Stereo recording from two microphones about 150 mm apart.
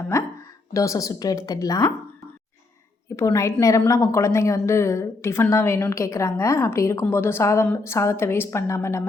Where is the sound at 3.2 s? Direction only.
20° left (ahead or behind).